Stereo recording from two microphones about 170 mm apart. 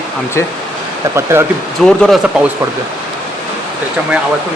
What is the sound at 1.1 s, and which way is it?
Speech, 15° right (ahead or behind).